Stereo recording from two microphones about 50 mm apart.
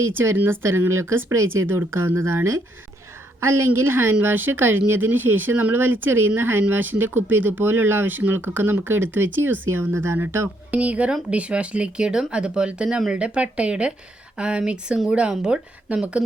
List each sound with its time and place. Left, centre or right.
0.3 s speech: right
9.9 s speech: right
10.7 s speech: right